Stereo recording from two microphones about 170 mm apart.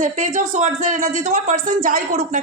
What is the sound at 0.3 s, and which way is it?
Speech, 45° right (ahead or behind).